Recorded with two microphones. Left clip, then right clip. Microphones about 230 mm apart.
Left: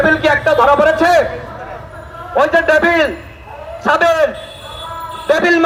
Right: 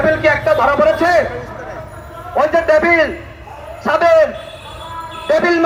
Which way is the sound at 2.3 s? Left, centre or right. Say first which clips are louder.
Left 1 dB; left.